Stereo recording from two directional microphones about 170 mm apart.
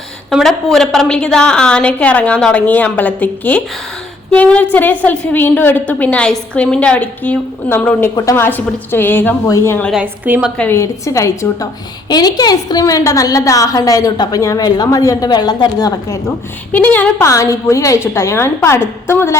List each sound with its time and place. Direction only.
0.3 s a woman's voice: centre (ahead or behind)
9.9 s a woman's voice: 10° right (ahead or behind)
10.6 s a woman's voice: 15° left (ahead or behind)
16.7 s a woman's voice: 10° left (ahead or behind)